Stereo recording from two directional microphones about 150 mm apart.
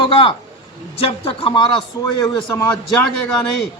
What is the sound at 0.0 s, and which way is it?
Speech, 35° left (ahead or behind).